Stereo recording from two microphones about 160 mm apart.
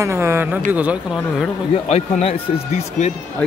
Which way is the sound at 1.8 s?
40° left (ahead or behind).